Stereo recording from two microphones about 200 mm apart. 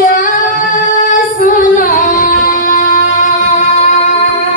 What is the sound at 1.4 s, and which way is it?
Music, 40° left (ahead or behind).